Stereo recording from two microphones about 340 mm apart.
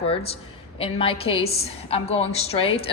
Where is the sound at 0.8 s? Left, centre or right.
Centre.